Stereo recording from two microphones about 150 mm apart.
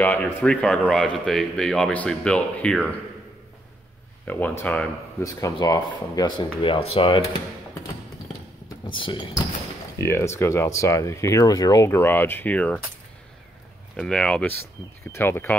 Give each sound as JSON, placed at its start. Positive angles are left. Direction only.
{"t": 0.0, "sound": "speech", "side_deg": 10}
{"t": 4.3, "sound": "speech", "side_deg": 10}
{"t": 5.2, "sound": "speech", "side_deg": 25}
{"t": 8.8, "sound": "speech", "side_deg": 35}
{"t": 9.9, "sound": "speech", "side_deg": 20}
{"t": 13.9, "sound": "speech", "side_deg": 5}